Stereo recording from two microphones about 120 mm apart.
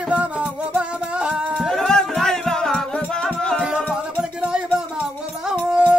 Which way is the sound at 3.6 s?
5° right (ahead or behind).